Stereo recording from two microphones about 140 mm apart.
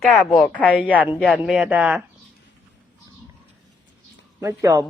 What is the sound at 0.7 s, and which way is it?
Speech, 10° right (ahead or behind).